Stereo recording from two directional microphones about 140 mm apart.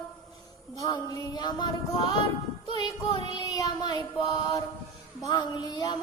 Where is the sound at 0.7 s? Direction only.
25° left (ahead or behind).